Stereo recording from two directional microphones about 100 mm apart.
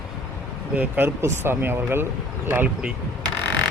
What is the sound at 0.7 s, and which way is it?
Speech, 15° right (ahead or behind).